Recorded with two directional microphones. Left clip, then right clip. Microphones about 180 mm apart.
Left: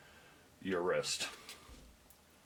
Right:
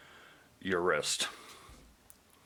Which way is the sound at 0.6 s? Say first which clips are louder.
Right 4 dB; 35° right (ahead or behind).